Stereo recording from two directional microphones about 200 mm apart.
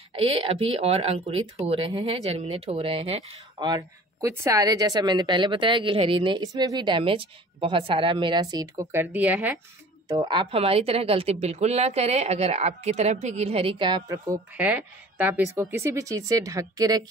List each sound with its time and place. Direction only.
0.2 s speech: 30° right (ahead or behind); by 9.6 s 10° right (ahead or behind)
10.0 s a woman's voice: 20° right (ahead or behind)